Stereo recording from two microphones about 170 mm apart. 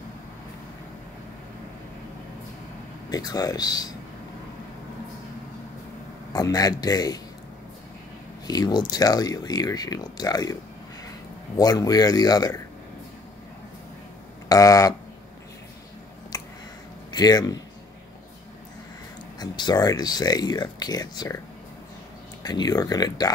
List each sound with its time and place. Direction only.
3.1 s speech: 20° left (ahead or behind)
6.3 s speech: 20° left (ahead or behind)
8.5 s speech: 25° left (ahead or behind)
14.5 s speech: 20° left (ahead or behind)
16.3 s a sound: 20° left (ahead or behind)
17.1 s speech: 25° left (ahead or behind)
19.4 s speech: 25° left (ahead or behind)
22.4 s speech: 25° left (ahead or behind)